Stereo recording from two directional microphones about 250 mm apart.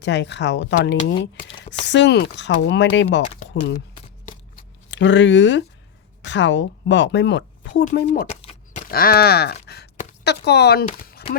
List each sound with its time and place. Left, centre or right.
0.0 s speech: left
4.9 s speech: left
7.9 s speech: left
8.4 s a sound: left
8.9 s speech: left
11.0 s a sound: left